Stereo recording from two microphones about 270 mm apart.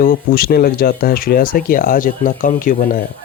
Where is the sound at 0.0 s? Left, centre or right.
Left.